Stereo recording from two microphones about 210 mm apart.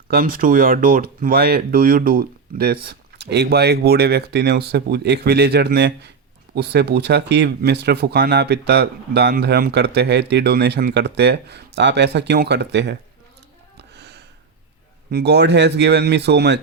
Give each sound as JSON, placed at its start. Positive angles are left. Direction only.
{"t": 0.1, "sound": "speech", "side_deg": -45}
{"t": 13.7, "sound": "a sound", "side_deg": -55}
{"t": 15.1, "sound": "speech", "side_deg": -55}